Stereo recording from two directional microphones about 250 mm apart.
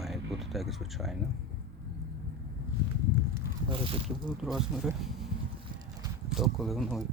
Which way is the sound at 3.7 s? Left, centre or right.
Right.